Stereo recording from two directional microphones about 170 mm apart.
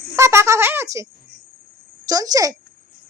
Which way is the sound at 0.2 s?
15° right (ahead or behind).